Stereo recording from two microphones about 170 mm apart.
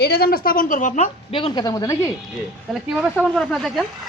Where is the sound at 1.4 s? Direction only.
30° left (ahead or behind).